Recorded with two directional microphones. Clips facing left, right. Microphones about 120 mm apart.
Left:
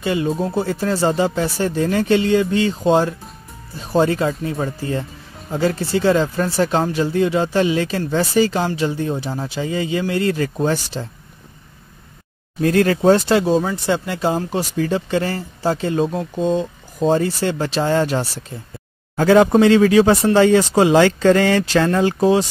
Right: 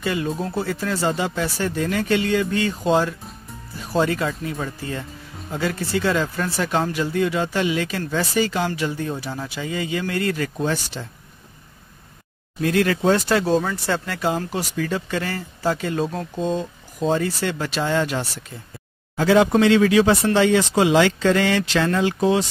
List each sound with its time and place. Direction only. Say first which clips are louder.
0.0 s speech: left 4 dB; 25° left (ahead or behind)
12.5 s speech: left 4 dB; 35° left (ahead or behind)
13.5 s speech: left 3 dB; 10° left (ahead or behind); by 16.1 s 25° left (ahead or behind)
16.1 s speech: left 5 dB; 10° left (ahead or behind)
17.0 s speech: left 4 dB; 30° left (ahead or behind); by 19.5 s 45° left (ahead or behind)
19.6 s speech: left 3 dB; 35° left (ahead or behind)